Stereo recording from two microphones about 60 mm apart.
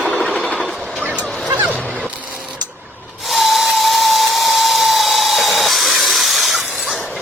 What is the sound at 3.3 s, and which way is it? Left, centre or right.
Tools, centre.